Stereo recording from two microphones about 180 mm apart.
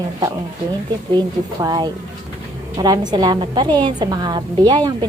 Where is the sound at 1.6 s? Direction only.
20° right (ahead or behind).